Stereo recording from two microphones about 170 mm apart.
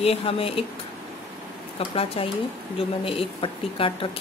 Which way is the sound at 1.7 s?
35° left (ahead or behind).